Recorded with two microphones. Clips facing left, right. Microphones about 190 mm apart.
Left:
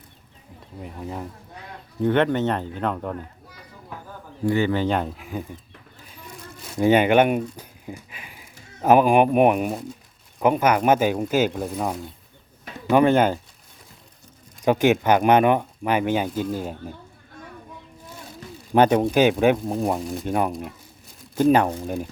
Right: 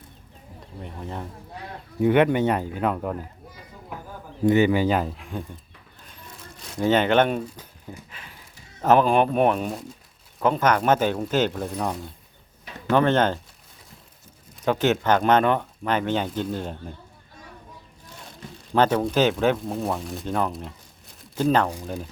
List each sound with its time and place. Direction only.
0.8 s speech: 5° left (ahead or behind)
2.0 s a man's voice: 10° right (ahead or behind)
4.4 s speech: 15° right (ahead or behind); by 5.5 s 5° left (ahead or behind)
6.7 s speech: 10° left (ahead or behind)
14.6 s speech: 15° left (ahead or behind)
18.7 s speech: 15° left (ahead or behind)
20.0 s speech: centre (ahead or behind)
20.2 s speech: 15° left (ahead or behind)